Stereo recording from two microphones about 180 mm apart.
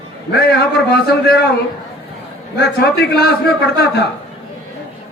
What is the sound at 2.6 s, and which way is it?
Male singing, 60° left (ahead or behind).